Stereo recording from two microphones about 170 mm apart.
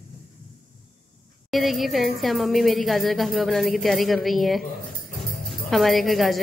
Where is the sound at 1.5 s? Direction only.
Centre (ahead or behind).